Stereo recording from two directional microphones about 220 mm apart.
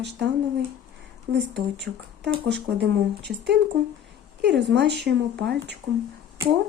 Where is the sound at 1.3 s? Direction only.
50° right (ahead or behind).